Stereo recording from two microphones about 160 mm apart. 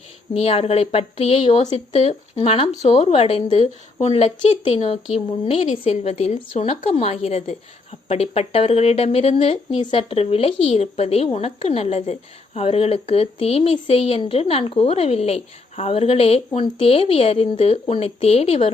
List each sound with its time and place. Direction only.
0.3 s speech: 40° left (ahead or behind)